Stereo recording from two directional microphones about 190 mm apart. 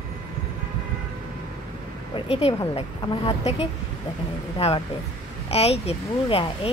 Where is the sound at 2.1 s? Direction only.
30° left (ahead or behind).